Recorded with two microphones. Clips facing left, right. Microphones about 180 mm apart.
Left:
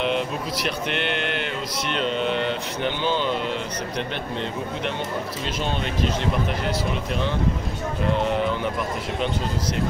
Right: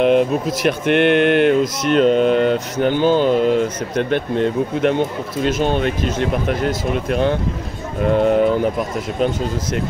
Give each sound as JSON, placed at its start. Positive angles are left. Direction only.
{"t": 0.0, "sound": "speech", "side_deg": -50}